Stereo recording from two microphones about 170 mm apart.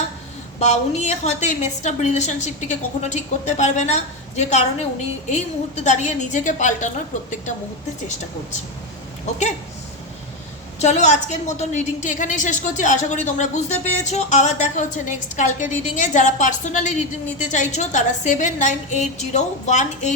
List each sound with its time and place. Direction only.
0.6 s a woman's voice: 40° left (ahead or behind)
10.8 s a woman's voice: 40° left (ahead or behind)